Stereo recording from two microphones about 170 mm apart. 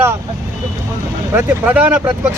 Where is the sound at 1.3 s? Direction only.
10° right (ahead or behind).